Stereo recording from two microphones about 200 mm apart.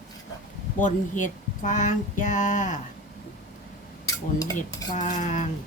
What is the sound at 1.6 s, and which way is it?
Speech, 40° left (ahead or behind).